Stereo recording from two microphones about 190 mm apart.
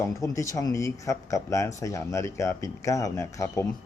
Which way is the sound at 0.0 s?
15° left (ahead or behind).